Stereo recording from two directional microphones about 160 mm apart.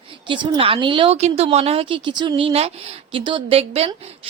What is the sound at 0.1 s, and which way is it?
A woman's voice, 30° right (ahead or behind).